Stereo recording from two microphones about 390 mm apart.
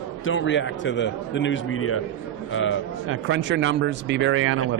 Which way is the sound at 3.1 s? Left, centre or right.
Right.